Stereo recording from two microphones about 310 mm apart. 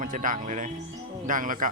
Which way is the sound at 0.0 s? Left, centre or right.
Right.